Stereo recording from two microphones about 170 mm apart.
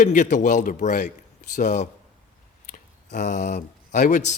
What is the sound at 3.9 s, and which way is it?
Speech, 45° left (ahead or behind).